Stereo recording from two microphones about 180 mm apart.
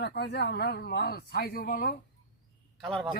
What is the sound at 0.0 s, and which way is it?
Speech, 65° left (ahead or behind).